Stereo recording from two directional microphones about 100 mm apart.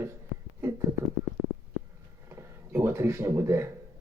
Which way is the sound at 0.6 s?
25° right (ahead or behind).